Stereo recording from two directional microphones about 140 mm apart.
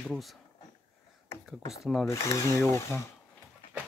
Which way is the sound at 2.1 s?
20° left (ahead or behind).